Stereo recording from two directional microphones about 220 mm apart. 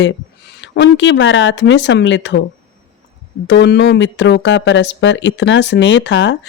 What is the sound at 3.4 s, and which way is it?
Speech, 55° left (ahead or behind).